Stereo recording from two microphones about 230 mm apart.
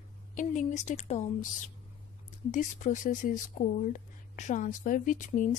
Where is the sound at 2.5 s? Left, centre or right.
Left.